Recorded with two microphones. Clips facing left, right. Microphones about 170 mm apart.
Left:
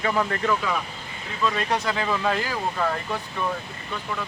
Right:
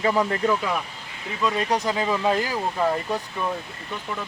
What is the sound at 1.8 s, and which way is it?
Speech, 15° right (ahead or behind).